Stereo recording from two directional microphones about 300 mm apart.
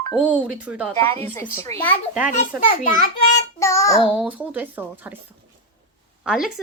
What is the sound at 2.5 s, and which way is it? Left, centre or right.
Speech, centre.